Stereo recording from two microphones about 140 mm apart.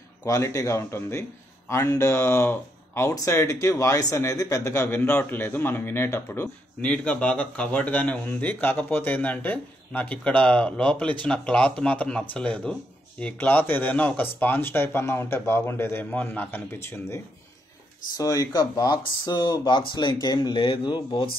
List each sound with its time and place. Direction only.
0.2 s speech: 20° left (ahead or behind)